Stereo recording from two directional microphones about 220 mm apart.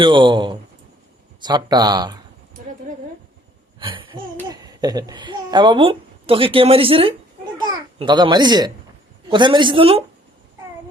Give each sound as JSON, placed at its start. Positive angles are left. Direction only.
{"t": 0.0, "sound": "speech", "side_deg": -20}
{"t": 3.8, "sound": "a sound", "side_deg": -20}
{"t": 4.4, "sound": "a woman's voice", "side_deg": -15}